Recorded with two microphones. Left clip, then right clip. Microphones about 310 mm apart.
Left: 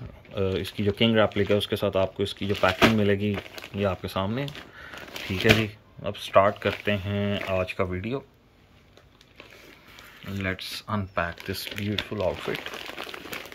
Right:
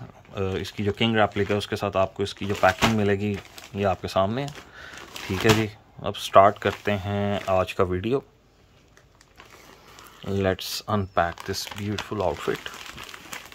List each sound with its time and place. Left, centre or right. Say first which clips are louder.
0.3 s speech: left 1 dB; centre
10.2 s speech: right 6 dB; right